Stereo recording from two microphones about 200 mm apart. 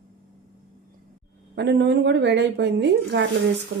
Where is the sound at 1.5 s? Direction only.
60° right (ahead or behind).